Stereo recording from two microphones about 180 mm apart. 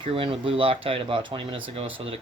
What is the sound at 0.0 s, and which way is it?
Speech, 30° right (ahead or behind).